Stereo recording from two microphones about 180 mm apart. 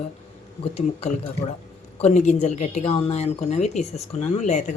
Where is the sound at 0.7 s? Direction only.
35° left (ahead or behind).